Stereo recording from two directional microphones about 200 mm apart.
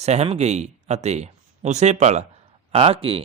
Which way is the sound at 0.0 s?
30° right (ahead or behind).